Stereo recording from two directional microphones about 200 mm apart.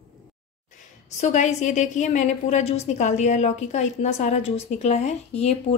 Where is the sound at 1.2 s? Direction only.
35° left (ahead or behind).